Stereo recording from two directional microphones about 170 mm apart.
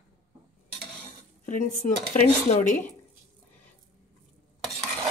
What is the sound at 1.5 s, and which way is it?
Speech, 45° left (ahead or behind).